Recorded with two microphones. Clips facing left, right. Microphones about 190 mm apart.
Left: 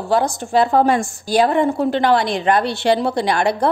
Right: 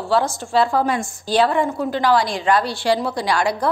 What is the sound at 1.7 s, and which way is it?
Speech, 60° left (ahead or behind).